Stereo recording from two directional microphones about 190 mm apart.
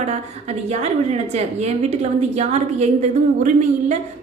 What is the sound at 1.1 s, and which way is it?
A woman's voice, 35° right (ahead or behind).